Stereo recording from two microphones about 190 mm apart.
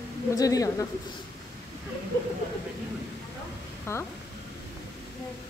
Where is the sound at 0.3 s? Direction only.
20° left (ahead or behind).